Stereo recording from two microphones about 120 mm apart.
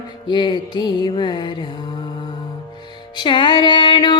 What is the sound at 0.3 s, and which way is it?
Music, 40° left (ahead or behind).